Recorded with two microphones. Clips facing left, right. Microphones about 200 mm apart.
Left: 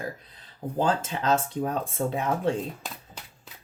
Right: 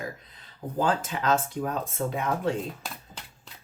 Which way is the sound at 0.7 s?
25° left (ahead or behind).